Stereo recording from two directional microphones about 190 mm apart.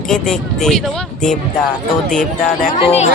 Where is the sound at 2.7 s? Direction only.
35° left (ahead or behind).